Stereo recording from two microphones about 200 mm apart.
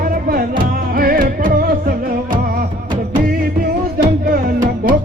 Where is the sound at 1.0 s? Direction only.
45° right (ahead or behind).